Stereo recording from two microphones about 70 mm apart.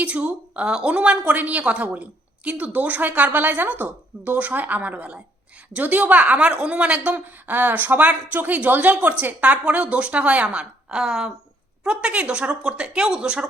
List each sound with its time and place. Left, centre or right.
0.0 s a woman's voice: right